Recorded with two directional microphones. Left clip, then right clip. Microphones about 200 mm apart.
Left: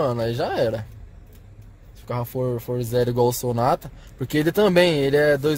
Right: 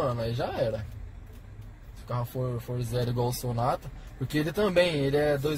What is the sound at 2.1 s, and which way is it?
Speech, 55° left (ahead or behind).